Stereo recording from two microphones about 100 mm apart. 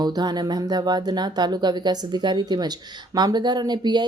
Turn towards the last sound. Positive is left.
turn(degrees=-45)  # may be behind; listen again after turning